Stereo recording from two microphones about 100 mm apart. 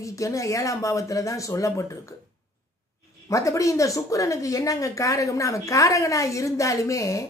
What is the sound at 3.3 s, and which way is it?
A woman's voice, 30° left (ahead or behind).